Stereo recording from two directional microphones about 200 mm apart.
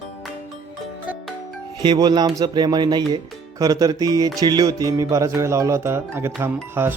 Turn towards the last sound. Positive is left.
turn(degrees=-10)  # may be behind; listen again after turning